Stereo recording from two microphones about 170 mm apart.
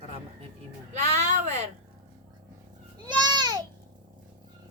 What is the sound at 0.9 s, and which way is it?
Speech, 40° right (ahead or behind).